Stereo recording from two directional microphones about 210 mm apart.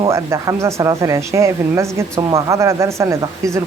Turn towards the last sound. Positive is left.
turn(degrees=-15)  # may be behind; listen again after turning